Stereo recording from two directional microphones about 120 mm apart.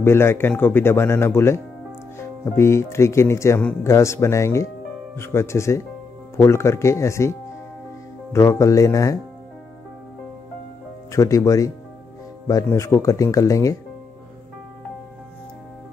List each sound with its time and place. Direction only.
0.0 s speech: 20° left (ahead or behind)
11.1 s speech: 25° left (ahead or behind)